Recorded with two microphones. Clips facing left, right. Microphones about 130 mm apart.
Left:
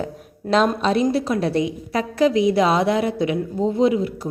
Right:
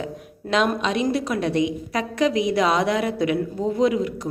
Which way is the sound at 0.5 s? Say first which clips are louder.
Left 3 dB; 35° left (ahead or behind).